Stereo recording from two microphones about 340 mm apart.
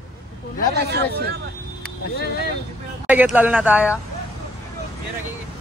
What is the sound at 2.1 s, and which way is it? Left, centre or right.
Speech, left.